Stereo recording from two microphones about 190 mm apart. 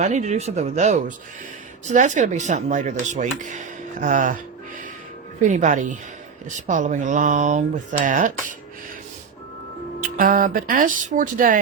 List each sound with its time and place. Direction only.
0.0 s speech: 35° right (ahead or behind)
5.4 s speech: 40° right (ahead or behind)
10.0 s speech: 45° right (ahead or behind)